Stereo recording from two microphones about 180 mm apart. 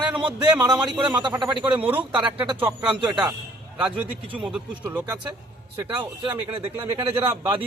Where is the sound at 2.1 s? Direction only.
25° right (ahead or behind).